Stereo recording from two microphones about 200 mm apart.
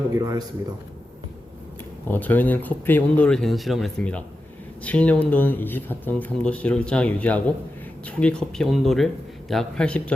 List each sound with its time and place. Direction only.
0.1 s a man's voice: 20° right (ahead or behind)
2.0 s speech: 10° left (ahead or behind)